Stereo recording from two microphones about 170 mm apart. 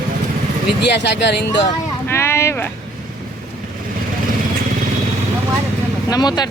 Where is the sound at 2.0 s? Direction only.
15° left (ahead or behind).